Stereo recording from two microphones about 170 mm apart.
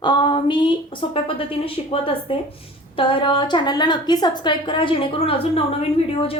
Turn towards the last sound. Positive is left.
turn(degrees=35)  # may be behind; listen again after turning